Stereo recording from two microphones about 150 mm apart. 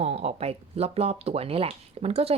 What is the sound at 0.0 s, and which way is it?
Speech, 45° right (ahead or behind).